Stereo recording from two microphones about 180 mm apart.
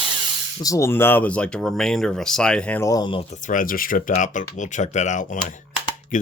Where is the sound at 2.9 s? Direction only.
25° left (ahead or behind).